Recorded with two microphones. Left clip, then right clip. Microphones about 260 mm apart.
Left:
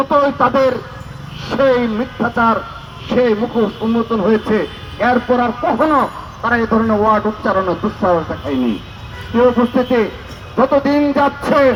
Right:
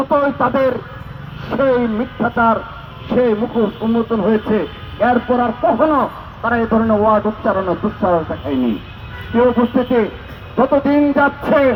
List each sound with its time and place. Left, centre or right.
0.0 s a man's voice: left